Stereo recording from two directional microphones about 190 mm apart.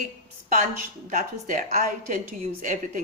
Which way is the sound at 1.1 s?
45° right (ahead or behind).